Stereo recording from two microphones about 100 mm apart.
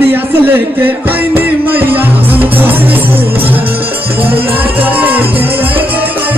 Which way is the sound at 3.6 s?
65° right (ahead or behind).